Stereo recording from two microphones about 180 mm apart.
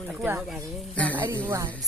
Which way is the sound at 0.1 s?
5° right (ahead or behind).